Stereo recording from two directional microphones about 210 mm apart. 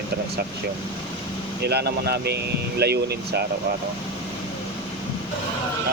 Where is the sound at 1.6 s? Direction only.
50° right (ahead or behind).